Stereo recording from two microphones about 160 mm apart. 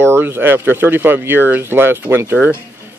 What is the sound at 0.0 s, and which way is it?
Speech, 15° right (ahead or behind).